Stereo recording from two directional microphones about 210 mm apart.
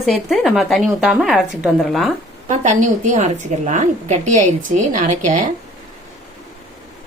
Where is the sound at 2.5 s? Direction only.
35° right (ahead or behind).